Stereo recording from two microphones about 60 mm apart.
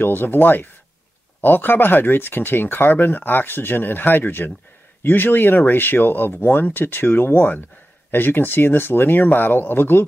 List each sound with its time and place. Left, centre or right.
0.0 s speech: left